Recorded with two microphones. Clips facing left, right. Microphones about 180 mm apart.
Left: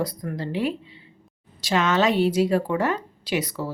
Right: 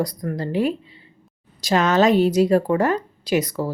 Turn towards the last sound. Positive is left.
turn(degrees=-40)  # may be behind; listen again after turning